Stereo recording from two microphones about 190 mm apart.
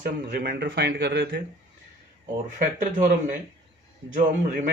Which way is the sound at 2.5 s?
40° right (ahead or behind).